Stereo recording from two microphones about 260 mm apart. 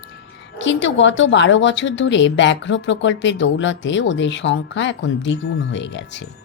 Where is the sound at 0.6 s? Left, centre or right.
Left.